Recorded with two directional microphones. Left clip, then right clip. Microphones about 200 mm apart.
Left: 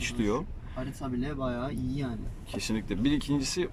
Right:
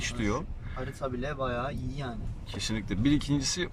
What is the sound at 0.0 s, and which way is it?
Speech, 5° left (ahead or behind).